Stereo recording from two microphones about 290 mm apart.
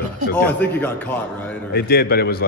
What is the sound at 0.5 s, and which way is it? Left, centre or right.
A man's voice, centre.